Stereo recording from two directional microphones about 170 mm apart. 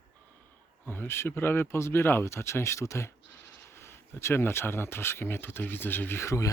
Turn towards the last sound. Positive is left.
turn(degrees=20)  # may be behind; listen again after turning